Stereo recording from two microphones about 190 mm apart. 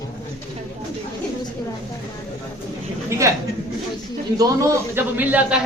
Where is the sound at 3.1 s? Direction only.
15° right (ahead or behind).